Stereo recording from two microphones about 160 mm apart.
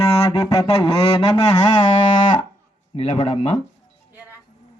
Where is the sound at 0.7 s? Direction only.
40° left (ahead or behind).